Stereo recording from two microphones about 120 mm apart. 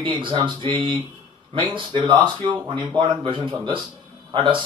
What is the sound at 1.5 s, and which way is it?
Speech, 40° right (ahead or behind).